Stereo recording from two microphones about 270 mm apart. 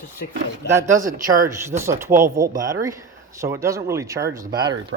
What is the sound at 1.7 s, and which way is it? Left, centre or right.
Speech, centre.